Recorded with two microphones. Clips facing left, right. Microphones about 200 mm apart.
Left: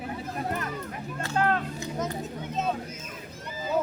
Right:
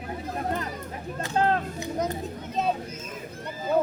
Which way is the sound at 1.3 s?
30° right (ahead or behind).